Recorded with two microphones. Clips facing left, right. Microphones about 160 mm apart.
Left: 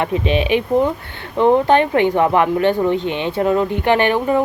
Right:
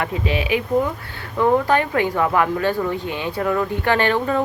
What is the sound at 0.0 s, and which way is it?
Speech, 20° left (ahead or behind).